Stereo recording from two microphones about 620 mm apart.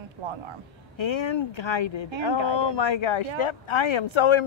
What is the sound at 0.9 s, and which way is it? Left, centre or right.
Speech, left.